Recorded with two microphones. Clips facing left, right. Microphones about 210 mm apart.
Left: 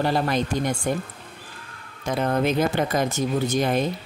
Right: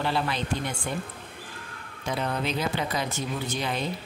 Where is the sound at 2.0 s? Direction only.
50° left (ahead or behind).